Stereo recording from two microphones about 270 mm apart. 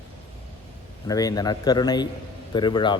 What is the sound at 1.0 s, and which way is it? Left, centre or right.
Speech, centre.